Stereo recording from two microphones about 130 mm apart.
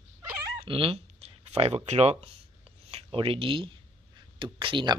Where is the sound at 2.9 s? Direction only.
45° right (ahead or behind).